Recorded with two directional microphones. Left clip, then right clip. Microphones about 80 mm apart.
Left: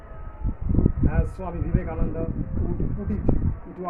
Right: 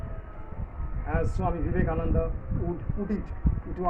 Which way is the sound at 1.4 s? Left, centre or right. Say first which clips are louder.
Right 2 dB; right.